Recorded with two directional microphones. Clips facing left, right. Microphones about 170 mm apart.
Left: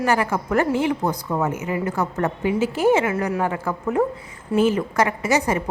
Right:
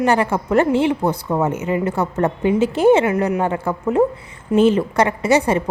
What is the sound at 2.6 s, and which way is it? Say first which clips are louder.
Speech: right 4 dB; 10° left (ahead or behind).